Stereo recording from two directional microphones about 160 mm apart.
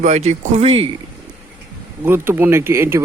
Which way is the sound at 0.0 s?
50° right (ahead or behind).